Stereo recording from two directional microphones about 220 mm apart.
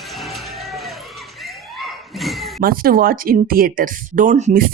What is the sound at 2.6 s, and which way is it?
Speech, 40° right (ahead or behind).